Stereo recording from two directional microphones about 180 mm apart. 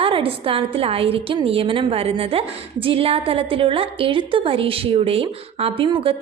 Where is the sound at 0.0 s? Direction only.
30° right (ahead or behind).